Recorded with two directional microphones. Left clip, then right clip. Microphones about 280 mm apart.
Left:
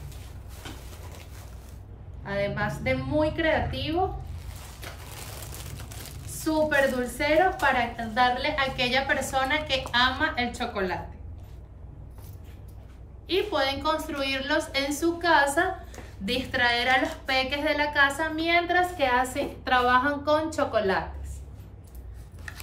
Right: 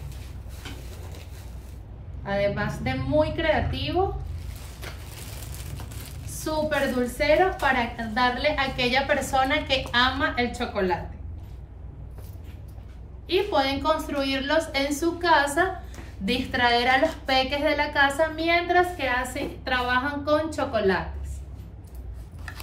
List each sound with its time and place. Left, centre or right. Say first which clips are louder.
2.2 s a woman's voice: right 3 dB; centre
6.2 s a woman's voice: left 2 dB; centre
13.3 s a woman's voice: right 2 dB; centre